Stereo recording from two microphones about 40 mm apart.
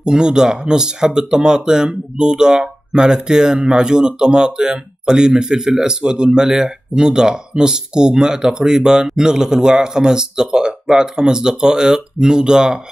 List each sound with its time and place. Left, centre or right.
0.0 s speech: centre